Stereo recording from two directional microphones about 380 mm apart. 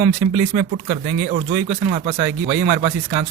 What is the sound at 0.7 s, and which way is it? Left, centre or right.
Speech, centre.